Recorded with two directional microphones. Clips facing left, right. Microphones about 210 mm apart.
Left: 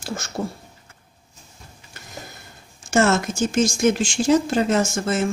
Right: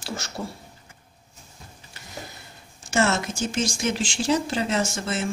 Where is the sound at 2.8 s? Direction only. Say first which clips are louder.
Left 5 dB; 50° left (ahead or behind).